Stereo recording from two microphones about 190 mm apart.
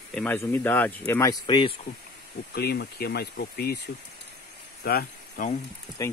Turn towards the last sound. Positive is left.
turn(degrees=15)  # may be behind; listen again after turning